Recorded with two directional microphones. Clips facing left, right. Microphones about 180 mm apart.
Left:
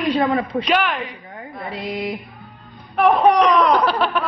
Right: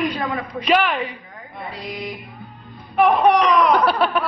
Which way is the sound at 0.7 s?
Centre (ahead or behind).